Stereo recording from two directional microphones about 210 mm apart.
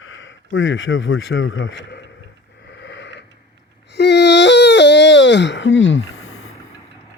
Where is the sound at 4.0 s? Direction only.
55° left (ahead or behind).